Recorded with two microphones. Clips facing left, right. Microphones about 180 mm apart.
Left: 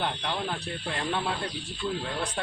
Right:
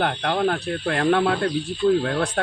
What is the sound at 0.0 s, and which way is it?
Speech, 65° right (ahead or behind).